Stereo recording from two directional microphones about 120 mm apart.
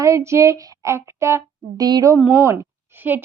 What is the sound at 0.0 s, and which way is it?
A woman's voice, 25° right (ahead or behind).